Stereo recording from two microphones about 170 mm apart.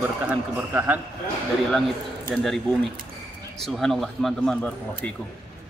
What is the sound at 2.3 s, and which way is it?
Speech, centre (ahead or behind).